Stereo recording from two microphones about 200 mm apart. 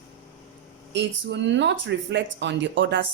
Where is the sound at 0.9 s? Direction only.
60° right (ahead or behind).